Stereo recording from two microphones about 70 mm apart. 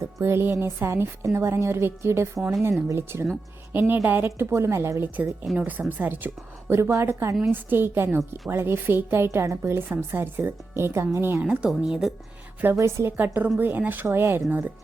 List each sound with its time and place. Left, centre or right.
0.0 s music: right
0.6 s a woman's voice: right
3.7 s a woman's voice: right
6.7 s a woman's voice: right
7.5 s a woman's voice: right
11.8 s speech: centre
12.7 s a woman's voice: right
13.1 s a woman's voice: right